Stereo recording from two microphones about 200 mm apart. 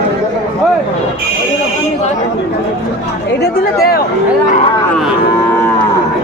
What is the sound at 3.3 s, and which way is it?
Speech, 50° left (ahead or behind).